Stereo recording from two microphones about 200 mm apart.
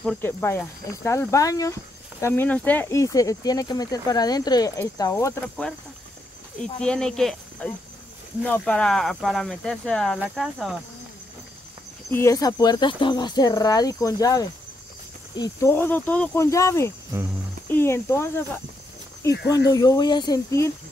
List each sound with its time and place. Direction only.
0.0 s speech: 10° left (ahead or behind)
6.8 s speech: 5° left (ahead or behind)
12.1 s speech: 15° left (ahead or behind)